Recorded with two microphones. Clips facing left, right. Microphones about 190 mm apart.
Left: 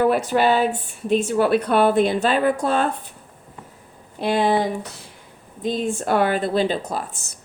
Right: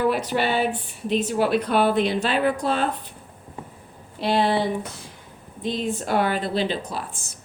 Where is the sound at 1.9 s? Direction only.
50° left (ahead or behind).